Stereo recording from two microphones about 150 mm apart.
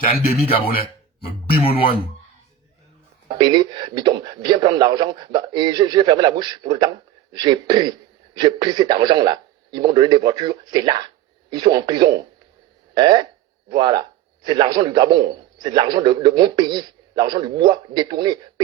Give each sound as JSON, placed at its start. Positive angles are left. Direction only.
{"t": 0.0, "sound": "speech", "side_deg": 75}
{"t": 3.2, "sound": "a man's voice", "side_deg": -30}